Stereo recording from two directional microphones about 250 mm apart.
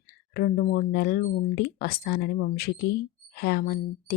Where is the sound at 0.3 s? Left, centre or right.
Left.